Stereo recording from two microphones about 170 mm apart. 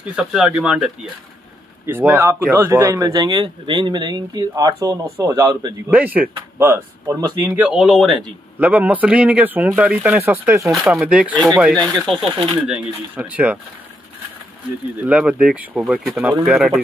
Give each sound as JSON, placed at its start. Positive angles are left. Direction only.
{"t": 0.1, "sound": "speech", "side_deg": -5}
{"t": 5.9, "sound": "speech", "side_deg": -10}
{"t": 7.4, "sound": "speech", "side_deg": -10}
{"t": 10.7, "sound": "speech", "side_deg": 0}
{"t": 11.7, "sound": "speech", "side_deg": 5}
{"t": 12.6, "sound": "speech", "side_deg": -5}
{"t": 15.0, "sound": "speech", "side_deg": -5}